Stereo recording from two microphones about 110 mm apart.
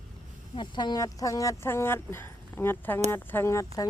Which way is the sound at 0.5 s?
45° left (ahead or behind).